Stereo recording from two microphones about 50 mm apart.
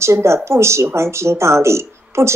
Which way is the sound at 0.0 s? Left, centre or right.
Right.